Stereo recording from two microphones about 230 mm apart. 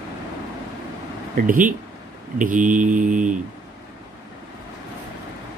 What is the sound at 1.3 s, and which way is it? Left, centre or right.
Mantra, right.